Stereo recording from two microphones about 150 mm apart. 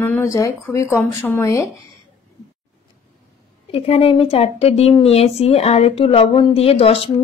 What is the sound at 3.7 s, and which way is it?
Speech, 40° left (ahead or behind).